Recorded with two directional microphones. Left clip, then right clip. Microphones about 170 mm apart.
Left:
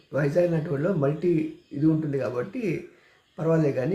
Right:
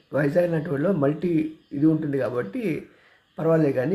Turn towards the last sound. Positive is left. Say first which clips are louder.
# right 3 dB
turn(degrees=-15)  # may be behind; listen again after turning